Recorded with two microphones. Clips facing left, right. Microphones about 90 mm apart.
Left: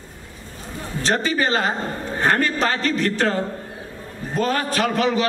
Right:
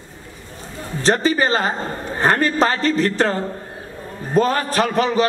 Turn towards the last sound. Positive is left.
turn(degrees=-35)  # may be behind; listen again after turning